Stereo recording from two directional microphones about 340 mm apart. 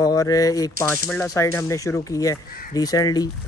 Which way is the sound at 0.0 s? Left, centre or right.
Centre.